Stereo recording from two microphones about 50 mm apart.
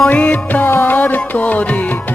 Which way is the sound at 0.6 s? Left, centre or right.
Left.